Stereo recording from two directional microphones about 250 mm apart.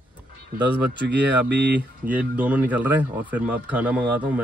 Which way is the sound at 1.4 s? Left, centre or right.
Right.